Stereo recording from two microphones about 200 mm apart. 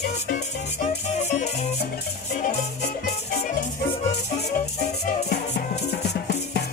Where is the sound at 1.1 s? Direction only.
35° left (ahead or behind).